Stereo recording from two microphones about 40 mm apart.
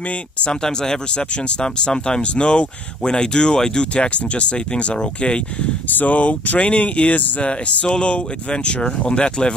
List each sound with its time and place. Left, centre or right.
0.5 s speech: centre
5.9 s speech: left